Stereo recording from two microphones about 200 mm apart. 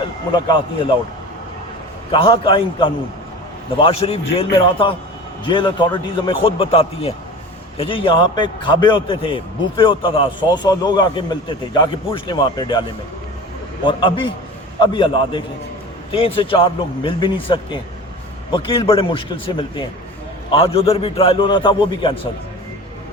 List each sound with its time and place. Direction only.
0.3 s a man's voice: 20° left (ahead or behind)
2.1 s a man's voice: 25° left (ahead or behind)
13.8 s a man's voice: 25° left (ahead or behind)